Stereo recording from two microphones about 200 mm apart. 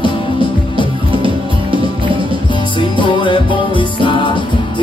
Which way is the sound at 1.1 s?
25° right (ahead or behind).